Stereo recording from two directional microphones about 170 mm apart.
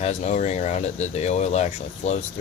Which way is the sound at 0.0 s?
40° left (ahead or behind).